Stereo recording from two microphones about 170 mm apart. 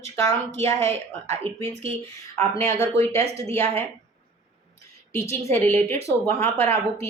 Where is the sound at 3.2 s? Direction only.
40° right (ahead or behind).